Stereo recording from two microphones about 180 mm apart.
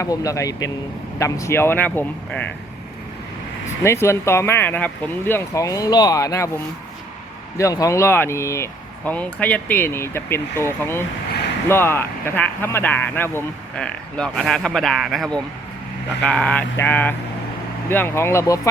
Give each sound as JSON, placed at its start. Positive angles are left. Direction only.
{"t": 0.0, "sound": "speech", "side_deg": 20}
{"t": 3.8, "sound": "speech", "side_deg": 15}
{"t": 7.6, "sound": "speech", "side_deg": 20}